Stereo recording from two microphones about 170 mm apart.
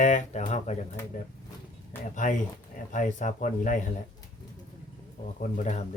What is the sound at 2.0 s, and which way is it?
Speech, 50° left (ahead or behind).